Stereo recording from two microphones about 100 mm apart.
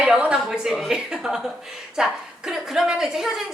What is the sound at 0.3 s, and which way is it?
A woman's voice, 5° right (ahead or behind).